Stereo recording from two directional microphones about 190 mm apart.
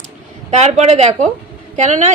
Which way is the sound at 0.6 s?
35° right (ahead or behind).